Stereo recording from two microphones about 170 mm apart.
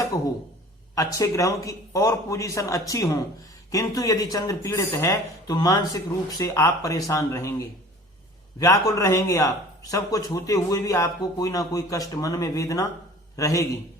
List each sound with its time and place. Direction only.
0.9 s a man's voice: 20° left (ahead or behind)